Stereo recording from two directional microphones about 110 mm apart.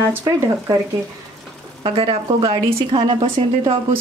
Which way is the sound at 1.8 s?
50° right (ahead or behind).